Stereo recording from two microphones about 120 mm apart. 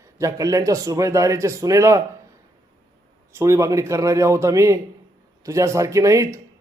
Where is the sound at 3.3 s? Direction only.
25° right (ahead or behind).